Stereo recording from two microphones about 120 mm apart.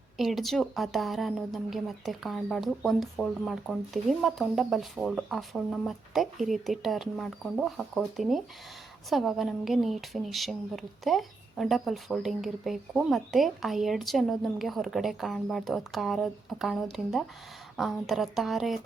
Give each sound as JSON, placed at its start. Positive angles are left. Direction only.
{"t": 0.2, "sound": "speech", "side_deg": 0}